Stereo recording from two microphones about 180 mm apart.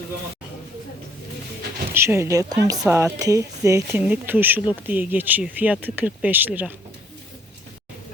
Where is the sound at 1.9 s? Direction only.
15° right (ahead or behind).